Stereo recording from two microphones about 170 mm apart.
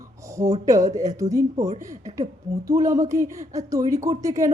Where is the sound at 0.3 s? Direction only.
20° right (ahead or behind).